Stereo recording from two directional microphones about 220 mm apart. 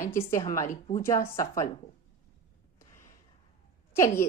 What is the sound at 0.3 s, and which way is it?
A woman's voice, 15° left (ahead or behind).